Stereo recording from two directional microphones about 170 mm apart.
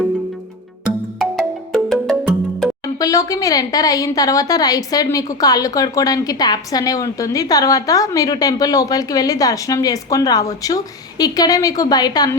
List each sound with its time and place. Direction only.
1.2 s music: 5° left (ahead or behind)
2.8 s speech: 20° left (ahead or behind)